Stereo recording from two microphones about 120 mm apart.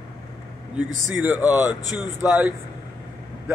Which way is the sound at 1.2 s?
15° right (ahead or behind).